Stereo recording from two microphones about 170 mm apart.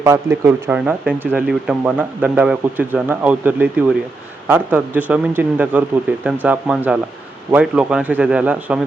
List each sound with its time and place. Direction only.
0.0 s speech: 15° right (ahead or behind)